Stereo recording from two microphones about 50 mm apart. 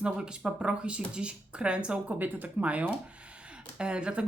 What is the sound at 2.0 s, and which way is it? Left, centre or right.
Speech, right.